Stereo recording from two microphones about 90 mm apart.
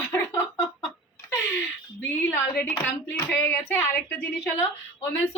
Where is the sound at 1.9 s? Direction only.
25° left (ahead or behind).